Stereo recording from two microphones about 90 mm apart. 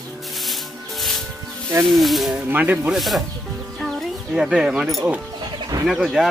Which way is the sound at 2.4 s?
20° right (ahead or behind).